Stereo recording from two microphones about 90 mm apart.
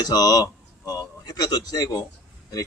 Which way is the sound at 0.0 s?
45° left (ahead or behind).